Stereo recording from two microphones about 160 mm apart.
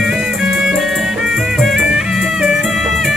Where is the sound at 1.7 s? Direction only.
5° right (ahead or behind).